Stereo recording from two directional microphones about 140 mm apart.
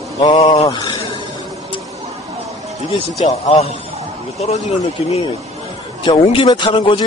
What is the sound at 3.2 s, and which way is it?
A man's voice, 50° left (ahead or behind).